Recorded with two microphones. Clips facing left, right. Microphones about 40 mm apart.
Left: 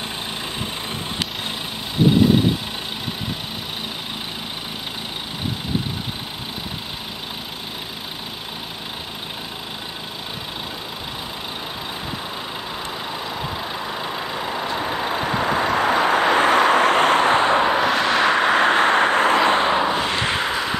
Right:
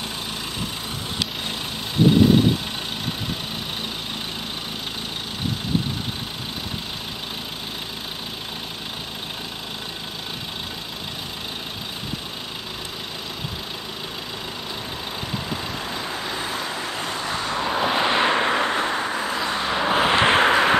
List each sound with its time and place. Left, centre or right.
14.5 s vehicle: left
17.8 s vehicle: centre
18.3 s vehicle: left
19.9 s a sound: centre